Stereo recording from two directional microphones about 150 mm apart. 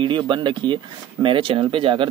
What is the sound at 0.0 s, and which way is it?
Speech, 30° right (ahead or behind).